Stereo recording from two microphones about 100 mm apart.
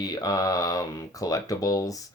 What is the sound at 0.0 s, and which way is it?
Speech, 40° left (ahead or behind).